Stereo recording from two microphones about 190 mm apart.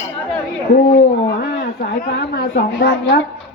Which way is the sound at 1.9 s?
60° left (ahead or behind).